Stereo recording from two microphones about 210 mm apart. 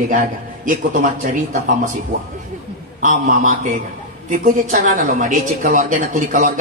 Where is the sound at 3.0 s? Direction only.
40° right (ahead or behind).